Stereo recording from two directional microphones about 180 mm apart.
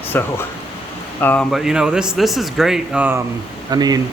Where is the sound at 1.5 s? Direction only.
Centre (ahead or behind).